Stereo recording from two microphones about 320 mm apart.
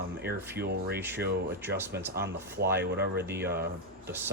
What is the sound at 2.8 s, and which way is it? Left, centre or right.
Speech, right.